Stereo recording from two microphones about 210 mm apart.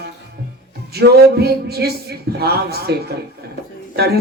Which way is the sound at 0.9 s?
50° right (ahead or behind).